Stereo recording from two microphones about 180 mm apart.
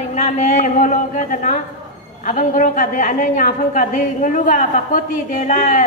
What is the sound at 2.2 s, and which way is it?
A woman's voice, 45° left (ahead or behind).